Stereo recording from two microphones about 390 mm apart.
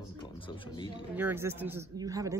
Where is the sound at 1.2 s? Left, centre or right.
Centre.